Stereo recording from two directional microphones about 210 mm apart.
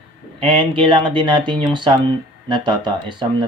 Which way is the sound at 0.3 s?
25° right (ahead or behind).